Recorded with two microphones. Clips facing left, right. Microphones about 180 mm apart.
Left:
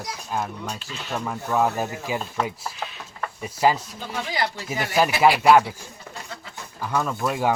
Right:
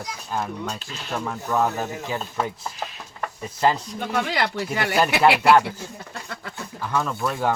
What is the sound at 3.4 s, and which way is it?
Speech, 10° left (ahead or behind).